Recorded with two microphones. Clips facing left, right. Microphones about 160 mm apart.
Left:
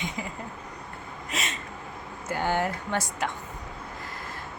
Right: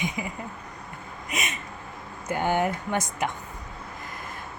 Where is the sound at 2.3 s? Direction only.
15° right (ahead or behind).